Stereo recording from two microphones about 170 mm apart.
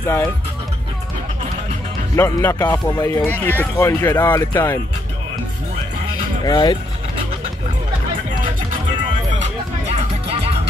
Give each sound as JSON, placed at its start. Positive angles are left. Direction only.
{"t": 0.0, "sound": "speech", "side_deg": 15}
{"t": 2.1, "sound": "speech", "side_deg": 15}
{"t": 6.4, "sound": "speech", "side_deg": 25}
{"t": 9.3, "sound": "music", "side_deg": -40}